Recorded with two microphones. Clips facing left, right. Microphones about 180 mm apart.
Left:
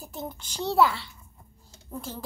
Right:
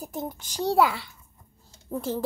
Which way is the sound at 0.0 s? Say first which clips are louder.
Right 4 dB; 15° right (ahead or behind).